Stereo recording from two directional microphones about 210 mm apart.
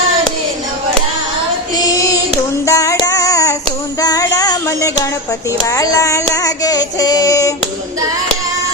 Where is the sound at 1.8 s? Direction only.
15° left (ahead or behind).